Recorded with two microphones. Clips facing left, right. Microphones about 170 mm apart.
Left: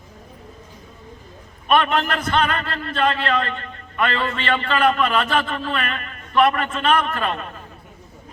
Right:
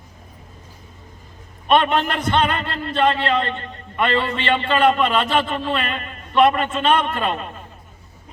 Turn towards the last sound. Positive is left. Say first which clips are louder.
# right 1 dB
turn(degrees=-25)  # may be behind; listen again after turning